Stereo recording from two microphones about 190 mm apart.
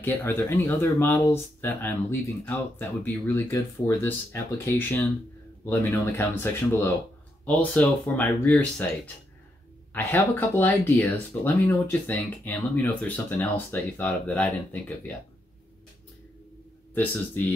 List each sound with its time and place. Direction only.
0.0 s speech: 10° left (ahead or behind)
16.9 s speech: 10° left (ahead or behind)